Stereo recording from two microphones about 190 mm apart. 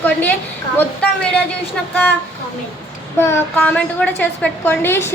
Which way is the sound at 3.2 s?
10° left (ahead or behind).